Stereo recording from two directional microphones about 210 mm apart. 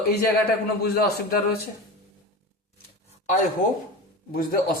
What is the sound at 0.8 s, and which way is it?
Speech, 45° left (ahead or behind).